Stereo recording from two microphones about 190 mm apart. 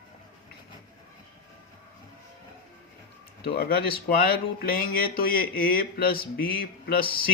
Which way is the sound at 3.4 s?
55° left (ahead or behind).